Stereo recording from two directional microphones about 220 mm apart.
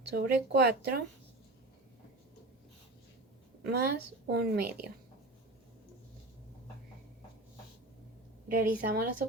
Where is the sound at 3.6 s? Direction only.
45° right (ahead or behind).